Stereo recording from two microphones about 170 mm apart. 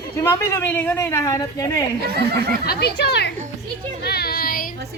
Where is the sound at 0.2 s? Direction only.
15° left (ahead or behind).